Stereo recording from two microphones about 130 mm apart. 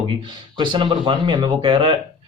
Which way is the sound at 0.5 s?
40° right (ahead or behind).